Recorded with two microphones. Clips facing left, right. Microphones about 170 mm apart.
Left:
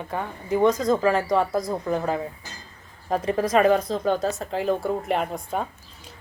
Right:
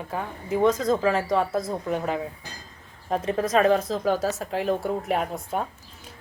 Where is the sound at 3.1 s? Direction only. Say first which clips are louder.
Left 2 dB; centre (ahead or behind).